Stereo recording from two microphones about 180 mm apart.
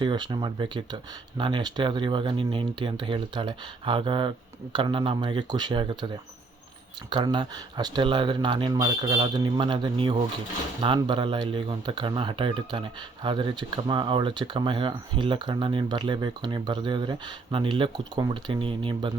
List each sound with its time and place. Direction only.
0.0 s speech: 25° right (ahead or behind)
7.1 s speech: 25° right (ahead or behind)